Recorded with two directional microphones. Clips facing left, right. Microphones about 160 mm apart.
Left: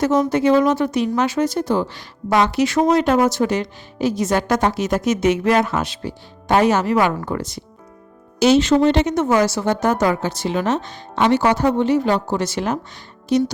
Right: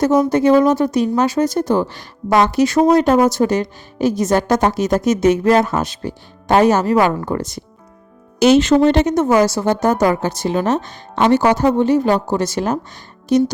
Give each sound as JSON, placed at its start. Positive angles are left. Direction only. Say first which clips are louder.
{"t": 0.0, "sound": "speech", "louder": "right 3 dB", "side_deg": -40}
{"t": 8.4, "sound": "a woman's voice", "louder": "right 3 dB", "side_deg": -55}